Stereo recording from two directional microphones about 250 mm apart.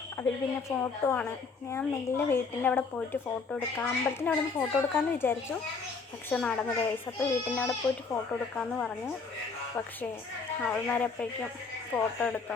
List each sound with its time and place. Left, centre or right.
0.2 s speech: centre
10.6 s speech: centre